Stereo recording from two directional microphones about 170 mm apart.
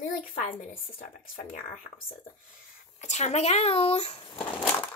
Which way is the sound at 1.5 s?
35° left (ahead or behind).